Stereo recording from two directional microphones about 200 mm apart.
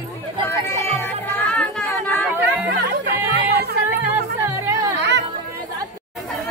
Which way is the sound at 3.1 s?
50° right (ahead or behind).